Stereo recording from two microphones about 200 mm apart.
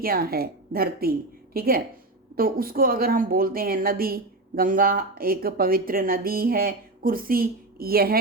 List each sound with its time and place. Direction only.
0.0 s speech: 50° right (ahead or behind)